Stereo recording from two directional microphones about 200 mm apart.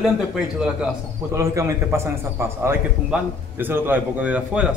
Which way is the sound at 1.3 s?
15° right (ahead or behind).